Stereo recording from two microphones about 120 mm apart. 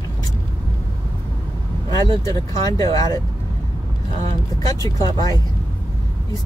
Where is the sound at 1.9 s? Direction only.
30° left (ahead or behind).